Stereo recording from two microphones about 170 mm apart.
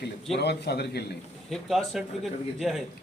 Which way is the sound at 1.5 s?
Centre (ahead or behind).